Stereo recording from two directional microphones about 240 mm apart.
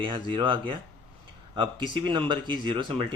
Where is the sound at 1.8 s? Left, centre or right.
Centre.